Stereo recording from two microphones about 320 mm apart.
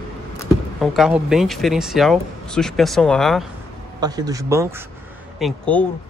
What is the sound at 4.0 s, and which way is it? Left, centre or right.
Speech, centre.